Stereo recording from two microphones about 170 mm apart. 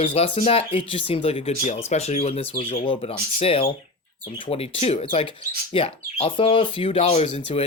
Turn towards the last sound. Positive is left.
turn(degrees=40)  # may be behind; listen again after turning